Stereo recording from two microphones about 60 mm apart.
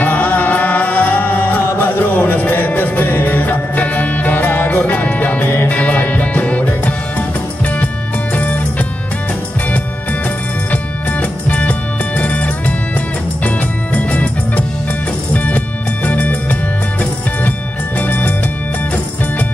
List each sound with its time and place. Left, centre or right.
0.0 s music: left
8.4 s music: left
10.7 s music: left
13.9 s music: left
17.9 s music: left